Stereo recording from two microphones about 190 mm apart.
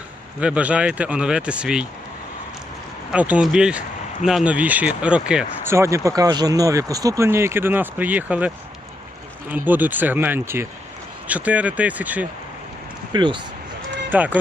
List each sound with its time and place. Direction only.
0.3 s speech: 5° right (ahead or behind)
3.1 s speech: 5° right (ahead or behind)
9.6 s speech: 10° right (ahead or behind)
13.1 s speech: 25° right (ahead or behind)
14.1 s speech: 10° right (ahead or behind)